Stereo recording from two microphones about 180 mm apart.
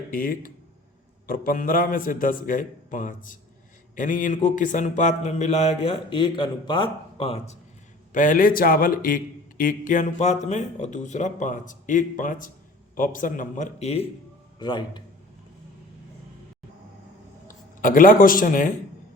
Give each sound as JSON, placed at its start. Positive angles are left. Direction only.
{"t": 0.1, "sound": "a man's voice", "side_deg": 50}
{"t": 8.1, "sound": "a man's voice", "side_deg": 45}
{"t": 14.6, "sound": "a man's voice", "side_deg": 25}
{"t": 17.5, "sound": "speech", "side_deg": 50}